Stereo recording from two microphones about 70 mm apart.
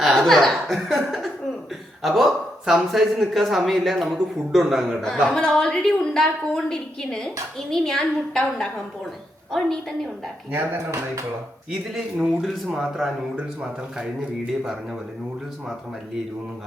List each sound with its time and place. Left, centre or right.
0.0 s speech: centre
5.3 s a woman's voice: centre
10.5 s speech: right
11.9 s speech: centre